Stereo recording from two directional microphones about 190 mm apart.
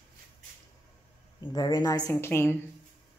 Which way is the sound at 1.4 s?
20° left (ahead or behind).